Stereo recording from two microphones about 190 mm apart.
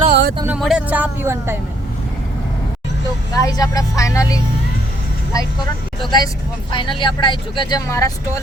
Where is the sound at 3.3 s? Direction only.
20° left (ahead or behind).